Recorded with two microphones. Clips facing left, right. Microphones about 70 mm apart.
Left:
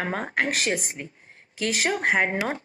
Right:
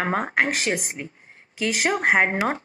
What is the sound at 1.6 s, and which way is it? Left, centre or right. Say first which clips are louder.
A woman's voice: right 2 dB; right.